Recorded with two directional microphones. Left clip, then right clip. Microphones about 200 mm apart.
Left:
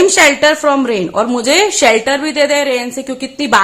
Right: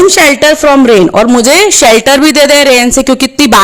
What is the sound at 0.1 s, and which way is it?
A woman's voice, 40° right (ahead or behind).